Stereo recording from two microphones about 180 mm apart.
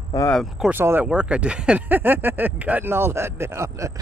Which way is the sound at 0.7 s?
10° right (ahead or behind).